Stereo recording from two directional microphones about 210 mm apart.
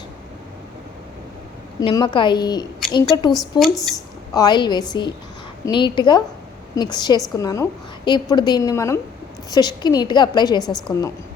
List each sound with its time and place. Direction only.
1.8 s a woman's voice: 20° left (ahead or behind)
3.6 s speech: centre (ahead or behind)
4.4 s a woman's voice: 20° left (ahead or behind)